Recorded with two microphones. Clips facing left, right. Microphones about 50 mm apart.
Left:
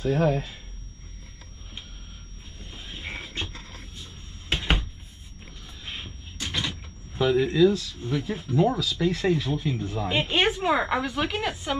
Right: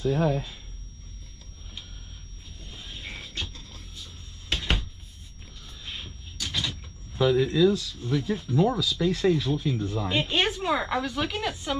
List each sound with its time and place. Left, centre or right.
0.0 s speech: left
2.6 s a sound: left
5.9 s door: left
9.2 s speech: left